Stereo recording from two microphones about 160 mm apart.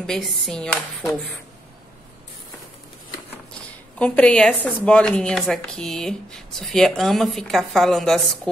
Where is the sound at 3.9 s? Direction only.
5° left (ahead or behind).